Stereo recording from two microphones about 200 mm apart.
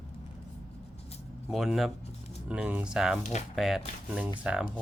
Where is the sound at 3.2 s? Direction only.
35° left (ahead or behind).